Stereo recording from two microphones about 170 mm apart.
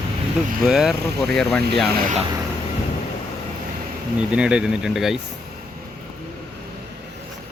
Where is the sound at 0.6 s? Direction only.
Centre (ahead or behind).